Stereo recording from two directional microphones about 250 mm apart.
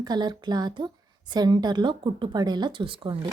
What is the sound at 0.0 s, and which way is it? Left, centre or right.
Speech, centre.